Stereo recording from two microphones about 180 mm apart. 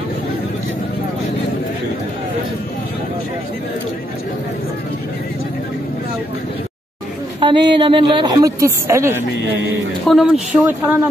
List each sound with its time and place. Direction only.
7.3 s a woman's voice: 25° right (ahead or behind)
10.0 s speech: centre (ahead or behind)